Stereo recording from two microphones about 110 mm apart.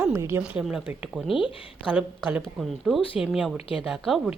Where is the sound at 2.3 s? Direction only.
Centre (ahead or behind).